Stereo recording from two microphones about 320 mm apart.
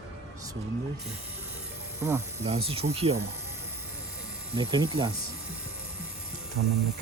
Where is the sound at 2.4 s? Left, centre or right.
Centre.